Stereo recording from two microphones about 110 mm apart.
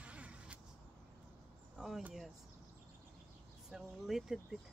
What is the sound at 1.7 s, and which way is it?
Speech, 5° right (ahead or behind).